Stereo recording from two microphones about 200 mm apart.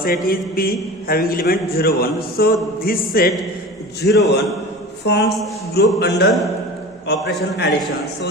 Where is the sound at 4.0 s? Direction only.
55° left (ahead or behind).